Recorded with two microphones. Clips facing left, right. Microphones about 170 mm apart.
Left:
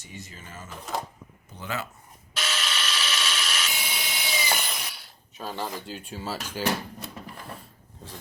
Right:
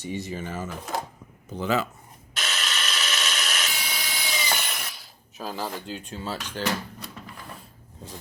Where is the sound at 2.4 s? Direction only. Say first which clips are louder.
Even; 45° right (ahead or behind).